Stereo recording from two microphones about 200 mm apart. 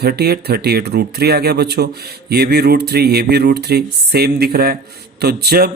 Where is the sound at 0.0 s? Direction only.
50° right (ahead or behind).